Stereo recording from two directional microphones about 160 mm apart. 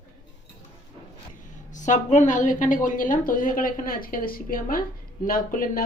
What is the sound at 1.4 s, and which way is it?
A woman's voice, 50° left (ahead or behind).